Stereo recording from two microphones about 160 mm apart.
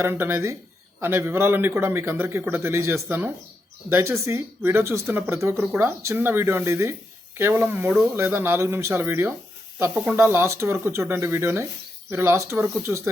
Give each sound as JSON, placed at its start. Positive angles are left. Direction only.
{"t": 0.0, "sound": "speech", "side_deg": -15}